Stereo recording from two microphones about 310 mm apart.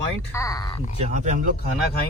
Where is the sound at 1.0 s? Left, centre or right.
Right.